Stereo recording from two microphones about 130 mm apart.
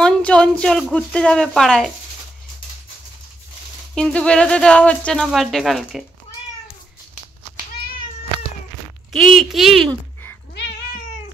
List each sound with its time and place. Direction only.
0.0 s speech: 5° left (ahead or behind)
3.9 s speech: 5° left (ahead or behind)
9.1 s speech: centre (ahead or behind)